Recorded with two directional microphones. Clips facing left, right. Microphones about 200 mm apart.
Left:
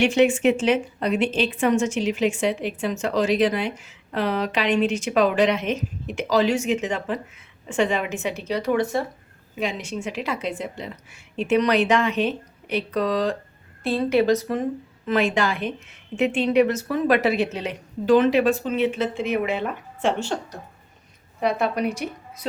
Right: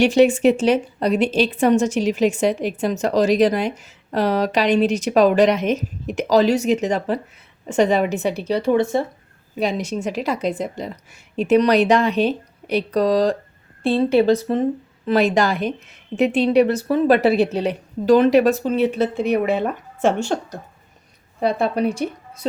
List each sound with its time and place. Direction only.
0.0 s a woman's voice: 35° right (ahead or behind)
9.6 s a woman's voice: 40° right (ahead or behind)
21.4 s a woman's voice: 30° right (ahead or behind)